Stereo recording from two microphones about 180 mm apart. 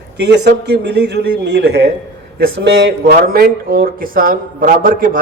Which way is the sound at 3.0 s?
55° right (ahead or behind).